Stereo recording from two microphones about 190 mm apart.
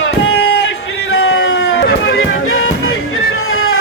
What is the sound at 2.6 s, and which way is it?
Music, 90° left.